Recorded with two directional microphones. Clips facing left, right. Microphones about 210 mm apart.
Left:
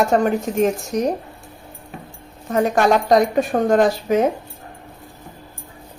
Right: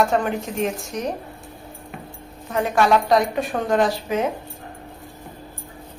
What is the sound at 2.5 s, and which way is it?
A woman's voice, 40° left (ahead or behind).